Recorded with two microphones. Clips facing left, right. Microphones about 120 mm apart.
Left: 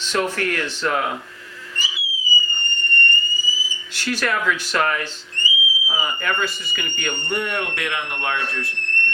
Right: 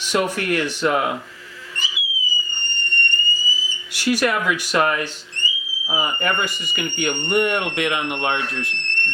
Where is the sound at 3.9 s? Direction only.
15° right (ahead or behind).